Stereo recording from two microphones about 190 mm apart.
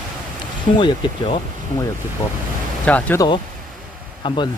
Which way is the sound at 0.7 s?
25° left (ahead or behind).